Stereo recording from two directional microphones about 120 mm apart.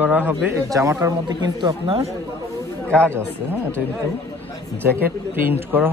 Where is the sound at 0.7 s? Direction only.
25° right (ahead or behind).